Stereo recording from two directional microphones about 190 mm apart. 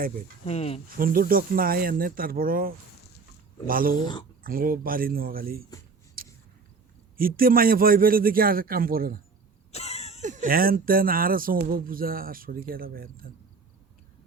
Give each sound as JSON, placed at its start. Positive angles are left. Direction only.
{"t": 0.4, "sound": "speech", "side_deg": 35}
{"t": 0.9, "sound": "speech", "side_deg": -50}
{"t": 7.2, "sound": "speech", "side_deg": -50}
{"t": 9.7, "sound": "a sound", "side_deg": 35}
{"t": 10.2, "sound": "speech", "side_deg": -40}